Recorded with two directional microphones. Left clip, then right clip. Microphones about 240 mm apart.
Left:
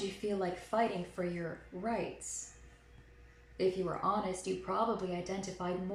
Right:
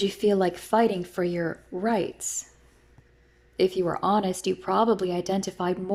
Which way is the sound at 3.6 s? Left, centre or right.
Right.